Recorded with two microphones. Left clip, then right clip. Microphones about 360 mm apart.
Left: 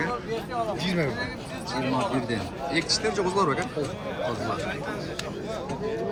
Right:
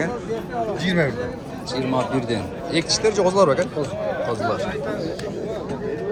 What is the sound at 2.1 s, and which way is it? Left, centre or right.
A man's voice, centre.